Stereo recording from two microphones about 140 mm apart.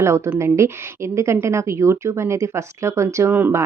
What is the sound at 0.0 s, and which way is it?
Speech, 20° right (ahead or behind).